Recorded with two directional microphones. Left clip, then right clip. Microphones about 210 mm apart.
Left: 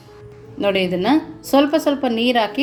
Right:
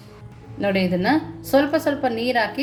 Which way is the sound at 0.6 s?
15° left (ahead or behind).